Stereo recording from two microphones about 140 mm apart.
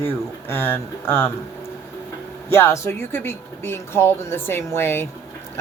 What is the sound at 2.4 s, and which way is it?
Speech, 15° left (ahead or behind).